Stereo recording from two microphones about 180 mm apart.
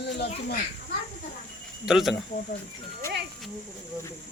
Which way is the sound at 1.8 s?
Centre (ahead or behind).